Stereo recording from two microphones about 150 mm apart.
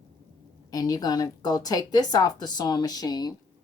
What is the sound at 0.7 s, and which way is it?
Speech, 25° left (ahead or behind).